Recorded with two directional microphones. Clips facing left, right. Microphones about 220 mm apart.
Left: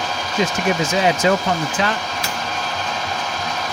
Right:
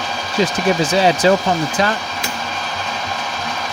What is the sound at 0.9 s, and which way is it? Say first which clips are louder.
Speech: right 4 dB; 35° right (ahead or behind).